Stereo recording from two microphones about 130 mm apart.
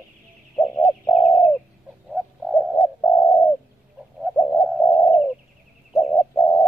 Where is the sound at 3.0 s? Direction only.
15° left (ahead or behind).